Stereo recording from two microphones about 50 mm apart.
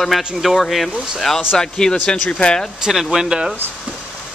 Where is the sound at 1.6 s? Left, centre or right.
Centre.